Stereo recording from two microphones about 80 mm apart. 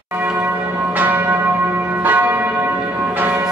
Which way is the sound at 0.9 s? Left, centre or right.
Right.